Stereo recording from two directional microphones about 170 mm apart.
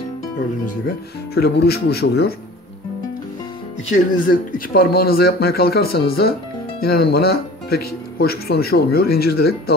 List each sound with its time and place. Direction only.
0.7 s speech: 65° left (ahead or behind)
3.9 s speech: 50° left (ahead or behind); by 9.8 s 65° left (ahead or behind)